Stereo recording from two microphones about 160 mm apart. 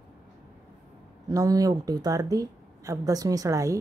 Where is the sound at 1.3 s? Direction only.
20° right (ahead or behind).